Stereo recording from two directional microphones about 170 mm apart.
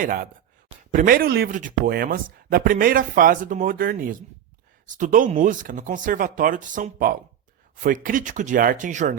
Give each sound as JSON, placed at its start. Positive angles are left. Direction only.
{"t": 0.0, "sound": "speech", "side_deg": -50}
{"t": 1.5, "sound": "speech", "side_deg": -50}